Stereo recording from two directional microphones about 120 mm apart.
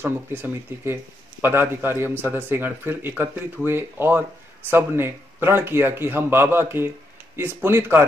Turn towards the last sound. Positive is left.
turn(degrees=-20)  # may be behind; listen again after turning